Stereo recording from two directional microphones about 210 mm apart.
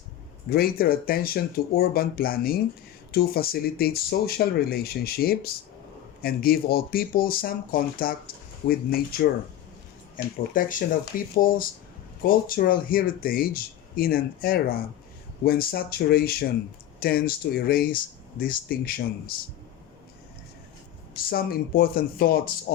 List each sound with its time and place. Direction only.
0.5 s speech: 45° left (ahead or behind)
21.1 s speech: 45° left (ahead or behind)